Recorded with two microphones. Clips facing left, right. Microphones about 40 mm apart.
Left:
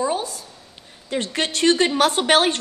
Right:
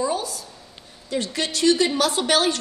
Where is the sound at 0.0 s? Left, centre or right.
Left.